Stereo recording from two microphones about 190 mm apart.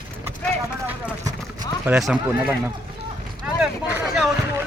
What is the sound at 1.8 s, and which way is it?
Speech, 5° right (ahead or behind).